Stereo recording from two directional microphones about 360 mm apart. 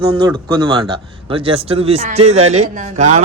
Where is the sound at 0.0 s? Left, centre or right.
Centre.